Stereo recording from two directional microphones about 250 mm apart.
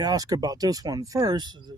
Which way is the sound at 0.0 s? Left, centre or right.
Centre.